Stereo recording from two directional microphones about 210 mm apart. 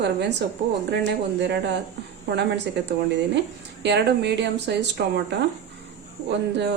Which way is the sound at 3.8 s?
55° right (ahead or behind).